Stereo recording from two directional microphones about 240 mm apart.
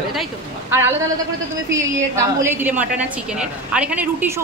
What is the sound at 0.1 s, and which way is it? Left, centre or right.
Speech, centre.